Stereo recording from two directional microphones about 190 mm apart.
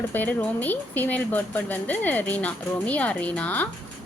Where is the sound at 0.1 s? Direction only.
10° left (ahead or behind).